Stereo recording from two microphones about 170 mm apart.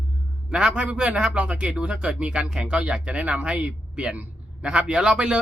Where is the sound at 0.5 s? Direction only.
5° right (ahead or behind).